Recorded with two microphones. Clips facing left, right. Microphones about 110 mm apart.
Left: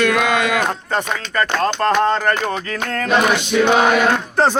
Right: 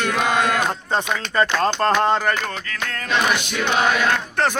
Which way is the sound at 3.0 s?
45° left (ahead or behind).